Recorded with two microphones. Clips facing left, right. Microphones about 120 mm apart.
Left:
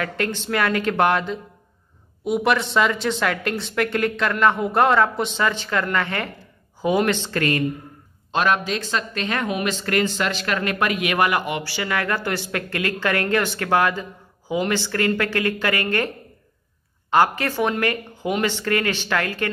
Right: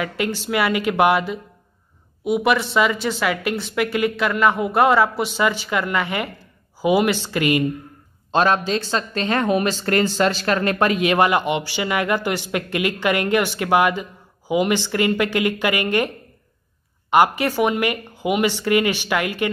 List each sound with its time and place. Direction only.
0.0 s speech: 10° right (ahead or behind)
8.3 s speech: 30° right (ahead or behind); by 16.1 s 15° right (ahead or behind)
17.1 s speech: 15° right (ahead or behind)